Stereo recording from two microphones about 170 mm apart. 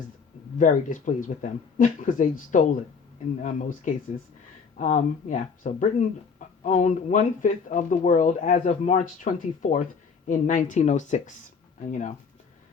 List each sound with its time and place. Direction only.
0.6 s speech: 50° left (ahead or behind)